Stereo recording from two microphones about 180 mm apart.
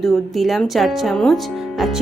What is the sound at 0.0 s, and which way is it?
Speech, centre (ahead or behind).